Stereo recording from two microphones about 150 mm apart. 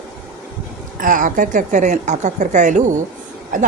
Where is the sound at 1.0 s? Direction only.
65° right (ahead or behind).